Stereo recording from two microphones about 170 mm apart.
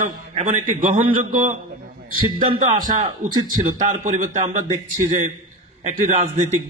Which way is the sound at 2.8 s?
50° right (ahead or behind).